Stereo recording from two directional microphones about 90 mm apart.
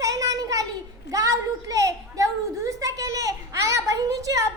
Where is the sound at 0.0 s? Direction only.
40° right (ahead or behind).